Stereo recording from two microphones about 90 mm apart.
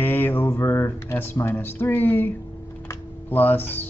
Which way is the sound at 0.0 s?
20° left (ahead or behind).